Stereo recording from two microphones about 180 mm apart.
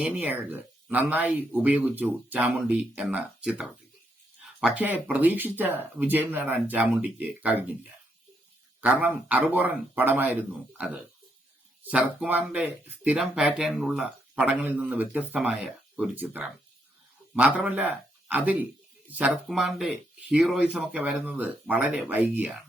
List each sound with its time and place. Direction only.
0.0 s speech: 10° right (ahead or behind)
8.8 s a man's voice: 10° right (ahead or behind)